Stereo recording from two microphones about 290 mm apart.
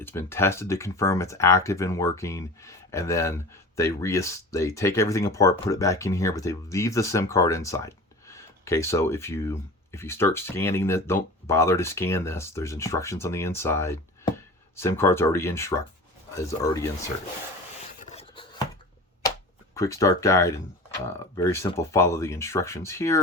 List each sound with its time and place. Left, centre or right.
0.0 s speech: centre
18.0 s a sound: left
19.7 s speech: centre